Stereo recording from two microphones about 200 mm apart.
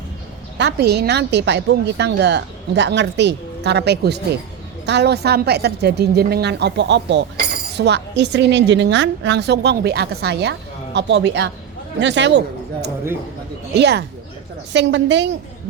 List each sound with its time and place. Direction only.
0.6 s a woman's voice: 55° right (ahead or behind)
13.7 s a woman's voice: 55° right (ahead or behind)